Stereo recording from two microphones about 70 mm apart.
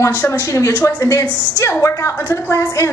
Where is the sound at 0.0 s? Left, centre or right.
Left.